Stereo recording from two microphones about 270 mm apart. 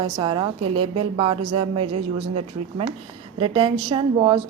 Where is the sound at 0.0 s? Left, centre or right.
Centre.